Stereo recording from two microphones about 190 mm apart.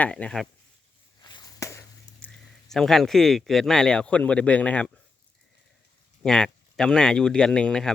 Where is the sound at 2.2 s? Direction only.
Centre (ahead or behind).